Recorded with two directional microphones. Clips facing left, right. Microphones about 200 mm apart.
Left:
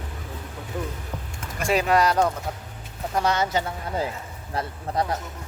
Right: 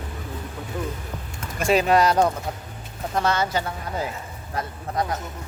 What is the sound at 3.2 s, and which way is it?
Speech, 15° left (ahead or behind).